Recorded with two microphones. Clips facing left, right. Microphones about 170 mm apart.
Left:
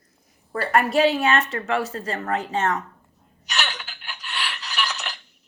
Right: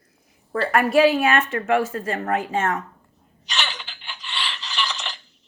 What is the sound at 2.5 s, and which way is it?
Speech, 45° right (ahead or behind).